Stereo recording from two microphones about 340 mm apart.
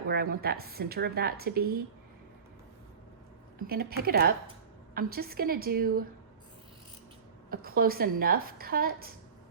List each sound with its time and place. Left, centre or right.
0.1 s a woman's voice: right
3.7 s a woman's voice: right
7.5 s a woman's voice: right